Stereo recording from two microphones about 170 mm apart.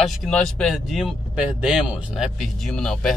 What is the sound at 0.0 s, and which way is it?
Speech, centre (ahead or behind).